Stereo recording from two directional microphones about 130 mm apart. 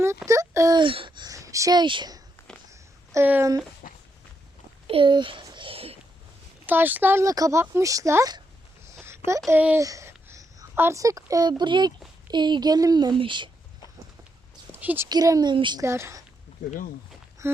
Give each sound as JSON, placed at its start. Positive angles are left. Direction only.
{"t": 0.3, "sound": "speech", "side_deg": -25}
{"t": 0.8, "sound": "speech", "side_deg": -40}
{"t": 3.1, "sound": "speech", "side_deg": -15}
{"t": 3.8, "sound": "walk", "side_deg": 90}
{"t": 4.9, "sound": "speech", "side_deg": -40}
{"t": 5.5, "sound": "whispering", "side_deg": -40}
{"t": 6.7, "sound": "speech", "side_deg": -15}
{"t": 9.0, "sound": "a sound", "side_deg": -20}
{"t": 9.5, "sound": "a child's voice", "side_deg": -15}
{"t": 14.7, "sound": "a sound", "side_deg": -15}
{"t": 15.1, "sound": "speech", "side_deg": -30}
{"t": 15.8, "sound": "speech", "side_deg": -20}
{"t": 17.4, "sound": "speech", "side_deg": -20}